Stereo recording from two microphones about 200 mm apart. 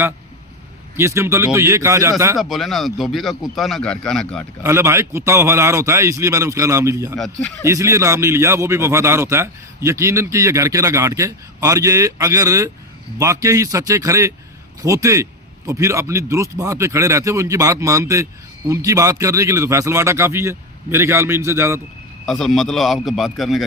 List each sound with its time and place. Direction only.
0.9 s a man's voice: 15° right (ahead or behind)
2.4 s a man's voice: centre (ahead or behind)
4.6 s a man's voice: 15° right (ahead or behind)
7.2 s a man's voice: 5° left (ahead or behind)
7.6 s a man's voice: 15° right (ahead or behind)
22.3 s a man's voice: centre (ahead or behind)